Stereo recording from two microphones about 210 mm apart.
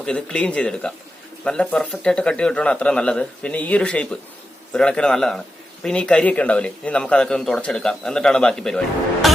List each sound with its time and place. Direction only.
0.0 s a man's voice: 5° left (ahead or behind)
9.2 s music: centre (ahead or behind)